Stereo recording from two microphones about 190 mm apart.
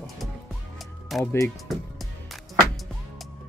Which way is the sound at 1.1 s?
Centre (ahead or behind).